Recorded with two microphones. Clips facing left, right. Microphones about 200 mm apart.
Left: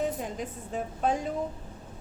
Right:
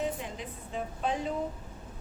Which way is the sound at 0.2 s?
45° left (ahead or behind).